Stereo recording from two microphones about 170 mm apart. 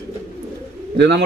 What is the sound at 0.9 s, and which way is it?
Speech, 90° right.